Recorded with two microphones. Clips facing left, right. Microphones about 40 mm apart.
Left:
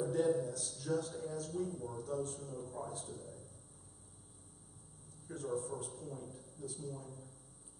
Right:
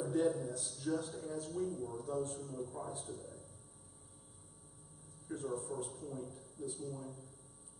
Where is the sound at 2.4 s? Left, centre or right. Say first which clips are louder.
Right 1 dB; centre.